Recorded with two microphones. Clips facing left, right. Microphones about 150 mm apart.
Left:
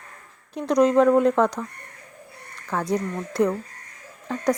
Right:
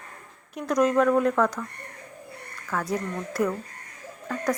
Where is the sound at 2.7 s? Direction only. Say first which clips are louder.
Left 3 dB; 25° left (ahead or behind).